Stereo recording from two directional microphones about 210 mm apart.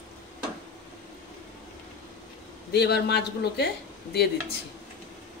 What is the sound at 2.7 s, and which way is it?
A man's voice, 50° left (ahead or behind).